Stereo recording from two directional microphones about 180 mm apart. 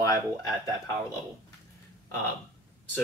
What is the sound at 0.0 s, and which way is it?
Speech, 20° left (ahead or behind).